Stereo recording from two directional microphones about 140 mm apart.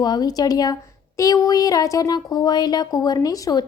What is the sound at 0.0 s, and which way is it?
Speech, 30° left (ahead or behind).